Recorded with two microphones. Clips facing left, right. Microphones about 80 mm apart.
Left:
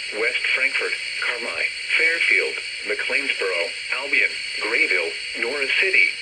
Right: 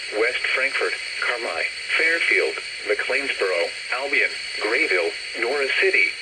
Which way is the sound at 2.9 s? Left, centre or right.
Right.